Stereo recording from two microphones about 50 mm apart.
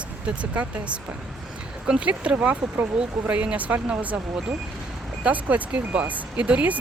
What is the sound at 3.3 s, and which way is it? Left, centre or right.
Speech, right.